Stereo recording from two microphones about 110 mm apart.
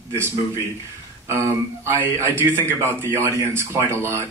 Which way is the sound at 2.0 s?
20° right (ahead or behind).